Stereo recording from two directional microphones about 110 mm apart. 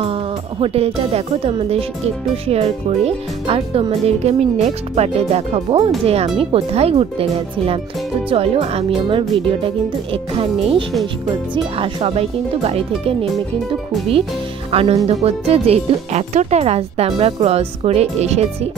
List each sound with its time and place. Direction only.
0.0 s speech: 60° right (ahead or behind)
14.7 s speech: 60° right (ahead or behind); by 18.7 s 80° right